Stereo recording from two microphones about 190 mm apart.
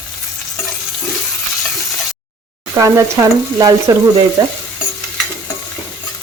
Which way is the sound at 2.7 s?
15° right (ahead or behind).